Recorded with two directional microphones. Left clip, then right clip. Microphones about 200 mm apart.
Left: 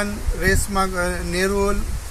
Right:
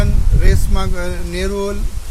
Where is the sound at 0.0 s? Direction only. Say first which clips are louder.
Left 2 dB; 5° left (ahead or behind).